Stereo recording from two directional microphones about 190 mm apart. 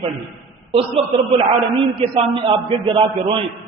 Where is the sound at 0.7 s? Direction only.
30° right (ahead or behind).